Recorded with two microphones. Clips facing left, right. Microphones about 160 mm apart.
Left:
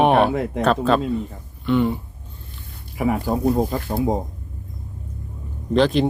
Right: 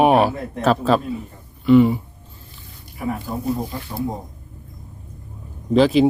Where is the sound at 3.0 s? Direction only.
90° left.